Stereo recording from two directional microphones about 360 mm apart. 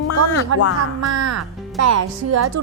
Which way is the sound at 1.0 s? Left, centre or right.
Right.